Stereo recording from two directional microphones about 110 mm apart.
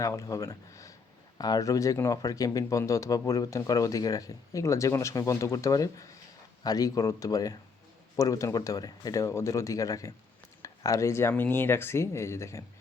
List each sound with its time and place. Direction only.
0.0 s speech: 30° left (ahead or behind)